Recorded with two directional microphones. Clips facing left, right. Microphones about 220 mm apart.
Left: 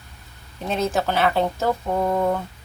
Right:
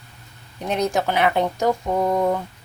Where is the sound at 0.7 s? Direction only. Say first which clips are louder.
Right 1 dB; 15° right (ahead or behind).